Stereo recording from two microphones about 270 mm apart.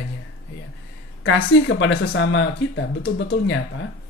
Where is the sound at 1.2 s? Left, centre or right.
Left.